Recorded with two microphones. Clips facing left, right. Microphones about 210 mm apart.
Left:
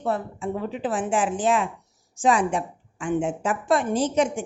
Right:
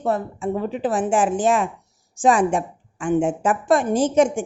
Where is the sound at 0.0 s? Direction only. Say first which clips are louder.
Right 4 dB; 45° right (ahead or behind).